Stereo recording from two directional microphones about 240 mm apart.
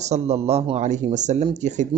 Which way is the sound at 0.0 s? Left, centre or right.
Right.